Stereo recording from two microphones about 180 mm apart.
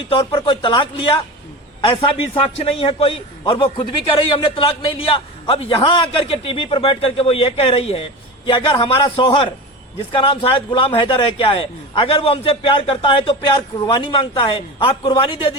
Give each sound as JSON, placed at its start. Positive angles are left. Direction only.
{"t": 0.0, "sound": "a man's voice", "side_deg": 30}